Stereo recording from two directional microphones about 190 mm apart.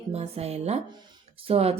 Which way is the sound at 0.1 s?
35° right (ahead or behind).